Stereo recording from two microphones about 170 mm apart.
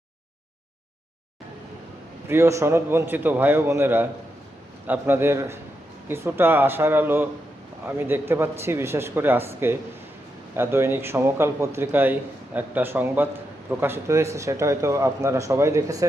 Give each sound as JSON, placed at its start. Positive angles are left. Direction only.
{"t": 2.3, "sound": "speech", "side_deg": -15}